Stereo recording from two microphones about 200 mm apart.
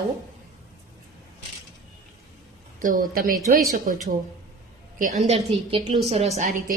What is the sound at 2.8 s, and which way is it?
A woman's voice, 45° right (ahead or behind).